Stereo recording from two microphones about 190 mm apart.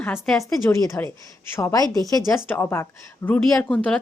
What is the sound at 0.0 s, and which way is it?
A woman's voice, 10° left (ahead or behind).